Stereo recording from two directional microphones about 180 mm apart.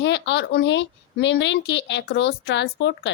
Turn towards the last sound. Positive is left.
turn(degrees=80)